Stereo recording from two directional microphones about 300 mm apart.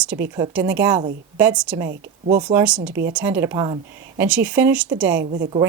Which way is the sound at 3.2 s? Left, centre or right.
Centre.